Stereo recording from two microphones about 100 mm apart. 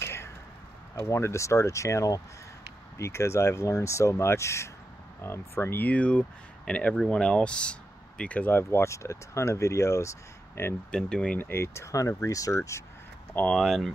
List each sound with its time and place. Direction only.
0.0 s a sound: 25° left (ahead or behind)
0.9 s speech: 25° left (ahead or behind)
10.9 s speech: 10° left (ahead or behind)
11.3 s speech: 25° left (ahead or behind)
13.3 s speech: 20° left (ahead or behind)
13.6 s speech: centre (ahead or behind)